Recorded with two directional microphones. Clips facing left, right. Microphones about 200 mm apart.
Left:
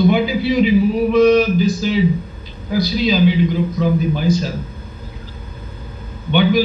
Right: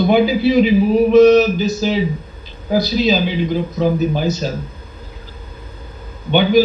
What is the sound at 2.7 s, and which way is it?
A woman's voice, 40° right (ahead or behind).